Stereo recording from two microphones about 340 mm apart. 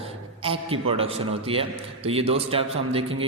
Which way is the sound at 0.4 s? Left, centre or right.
Centre.